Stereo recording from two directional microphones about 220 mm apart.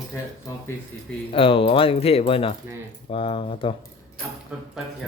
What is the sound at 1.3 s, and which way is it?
Speech, 25° left (ahead or behind).